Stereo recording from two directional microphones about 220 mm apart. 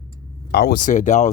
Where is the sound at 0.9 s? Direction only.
35° left (ahead or behind).